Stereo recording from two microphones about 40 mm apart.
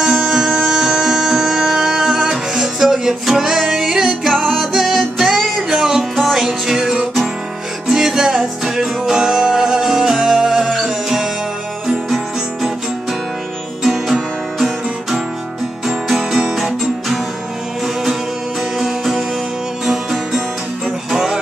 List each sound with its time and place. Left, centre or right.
0.0 s music: centre
13.8 s music: centre
18.8 s music: centre